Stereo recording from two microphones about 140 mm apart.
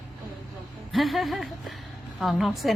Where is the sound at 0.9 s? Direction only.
Centre (ahead or behind).